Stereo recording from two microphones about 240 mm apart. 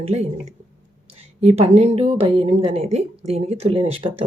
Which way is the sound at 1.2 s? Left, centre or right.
Right.